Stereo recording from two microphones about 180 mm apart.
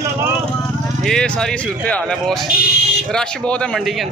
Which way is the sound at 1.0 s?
5° left (ahead or behind).